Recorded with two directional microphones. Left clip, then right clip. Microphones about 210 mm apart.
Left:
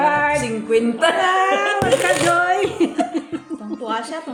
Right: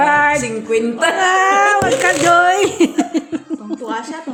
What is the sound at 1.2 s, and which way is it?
A woman's voice, 50° right (ahead or behind).